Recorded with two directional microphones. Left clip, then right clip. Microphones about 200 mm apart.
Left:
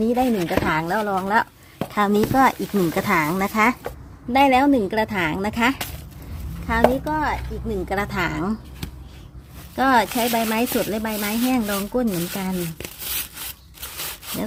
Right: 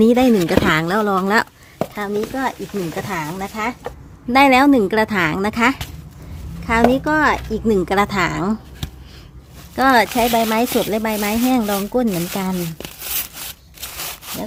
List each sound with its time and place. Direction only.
0.0 s speech: 30° right (ahead or behind)
2.0 s speech: 20° left (ahead or behind)
4.3 s speech: 15° right (ahead or behind)
7.1 s speech: 35° right (ahead or behind)
7.9 s speech: 15° right (ahead or behind)